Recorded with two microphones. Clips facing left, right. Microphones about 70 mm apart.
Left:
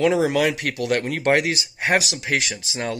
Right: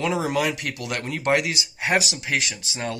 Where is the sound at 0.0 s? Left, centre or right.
Left.